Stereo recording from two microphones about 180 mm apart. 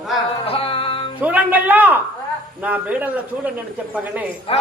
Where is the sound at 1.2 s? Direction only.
10° right (ahead or behind).